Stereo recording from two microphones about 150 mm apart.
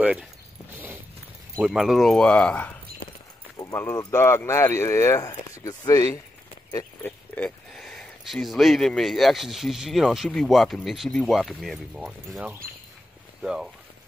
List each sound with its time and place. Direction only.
0.0 s speech: 5° right (ahead or behind)
1.6 s speech: 5° right (ahead or behind)
3.5 s keys jangling: 15° left (ahead or behind)
4.1 s speech: 15° left (ahead or behind)
7.0 s speech: 10° left (ahead or behind); by 13.7 s 5° right (ahead or behind)